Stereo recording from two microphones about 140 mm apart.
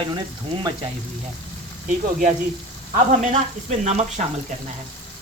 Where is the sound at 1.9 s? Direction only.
75° right (ahead or behind).